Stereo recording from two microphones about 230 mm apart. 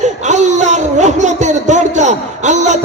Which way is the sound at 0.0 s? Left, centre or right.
Right.